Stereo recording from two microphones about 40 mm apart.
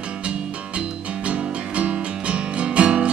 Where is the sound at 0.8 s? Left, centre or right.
Right.